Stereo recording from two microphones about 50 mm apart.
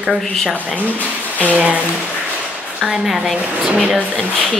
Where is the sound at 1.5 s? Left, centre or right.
Right.